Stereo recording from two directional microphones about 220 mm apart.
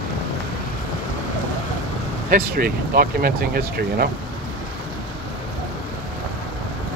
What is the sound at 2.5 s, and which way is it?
Speech, 40° right (ahead or behind).